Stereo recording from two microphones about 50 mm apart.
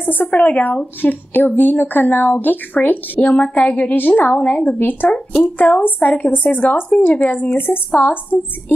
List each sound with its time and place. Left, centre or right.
0.0 s speech: left
4.7 s speech: left
7.5 s speech: left